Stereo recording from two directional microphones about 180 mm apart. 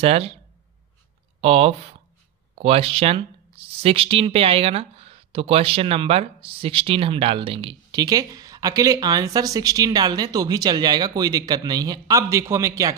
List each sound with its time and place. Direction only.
0.0 s speech: 35° right (ahead or behind)
1.4 s speech: 35° right (ahead or behind); by 12.9 s 15° right (ahead or behind)